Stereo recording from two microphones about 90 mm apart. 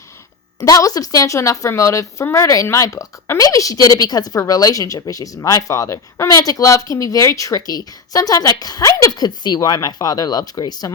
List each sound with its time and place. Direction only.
0.6 s speech: 40° left (ahead or behind)